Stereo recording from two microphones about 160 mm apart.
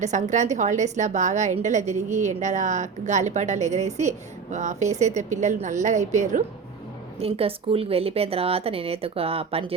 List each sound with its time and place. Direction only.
0.0 s a woman's voice: 50° right (ahead or behind)
7.2 s speech: 35° right (ahead or behind)